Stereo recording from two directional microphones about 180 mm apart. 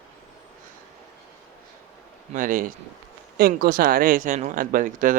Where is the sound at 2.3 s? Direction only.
50° right (ahead or behind).